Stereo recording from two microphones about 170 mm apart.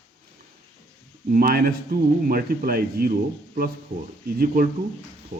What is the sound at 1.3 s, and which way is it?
Speech, 60° right (ahead or behind).